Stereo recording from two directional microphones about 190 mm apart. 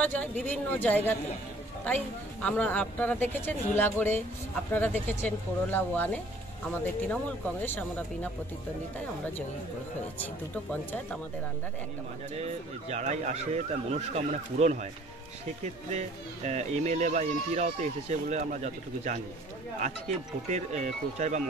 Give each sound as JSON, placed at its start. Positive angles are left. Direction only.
{"t": 0.0, "sound": "speech", "side_deg": 10}
{"t": 2.4, "sound": "speech", "side_deg": 5}
{"t": 10.1, "sound": "speech", "side_deg": 10}
{"t": 12.4, "sound": "speech", "side_deg": -35}